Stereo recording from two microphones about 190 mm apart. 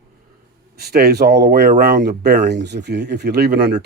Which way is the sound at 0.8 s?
55° right (ahead or behind).